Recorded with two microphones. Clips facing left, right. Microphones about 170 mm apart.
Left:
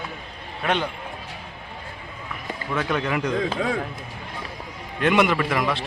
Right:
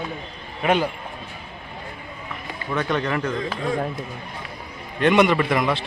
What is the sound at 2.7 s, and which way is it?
Speech, 5° left (ahead or behind).